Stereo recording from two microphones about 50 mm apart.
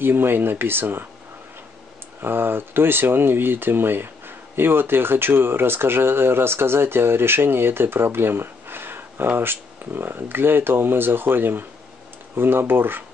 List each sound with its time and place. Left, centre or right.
0.0 s speech: right
2.2 s speech: right